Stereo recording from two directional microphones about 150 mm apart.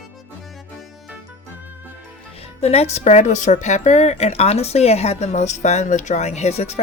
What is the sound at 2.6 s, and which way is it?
Speech, 45° left (ahead or behind).